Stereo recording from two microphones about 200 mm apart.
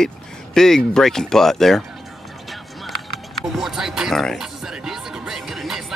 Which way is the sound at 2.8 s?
Centre (ahead or behind).